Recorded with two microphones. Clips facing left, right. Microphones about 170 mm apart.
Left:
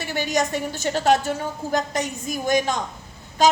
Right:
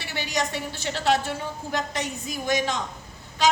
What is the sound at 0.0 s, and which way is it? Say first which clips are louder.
A woman's voice: left 5 dB; 45° left (ahead or behind).